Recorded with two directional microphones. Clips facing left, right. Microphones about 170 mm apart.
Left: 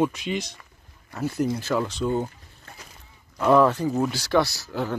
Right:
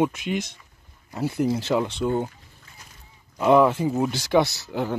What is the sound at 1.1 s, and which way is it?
Speech, 15° right (ahead or behind).